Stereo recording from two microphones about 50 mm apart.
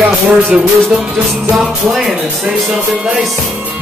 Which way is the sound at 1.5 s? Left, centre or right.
Centre.